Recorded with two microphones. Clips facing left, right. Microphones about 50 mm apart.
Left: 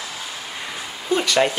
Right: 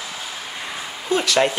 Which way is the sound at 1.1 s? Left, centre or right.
Centre.